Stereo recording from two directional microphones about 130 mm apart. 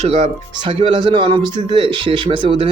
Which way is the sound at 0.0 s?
65° right (ahead or behind).